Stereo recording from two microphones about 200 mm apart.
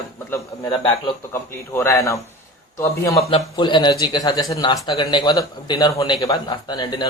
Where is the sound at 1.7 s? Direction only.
10° left (ahead or behind).